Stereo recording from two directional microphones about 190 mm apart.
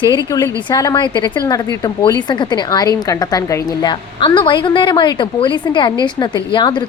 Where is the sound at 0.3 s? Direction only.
15° left (ahead or behind).